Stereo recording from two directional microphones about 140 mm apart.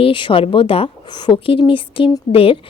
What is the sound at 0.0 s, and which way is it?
A woman's voice, 35° left (ahead or behind).